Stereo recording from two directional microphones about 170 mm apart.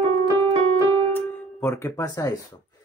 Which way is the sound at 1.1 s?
15° left (ahead or behind).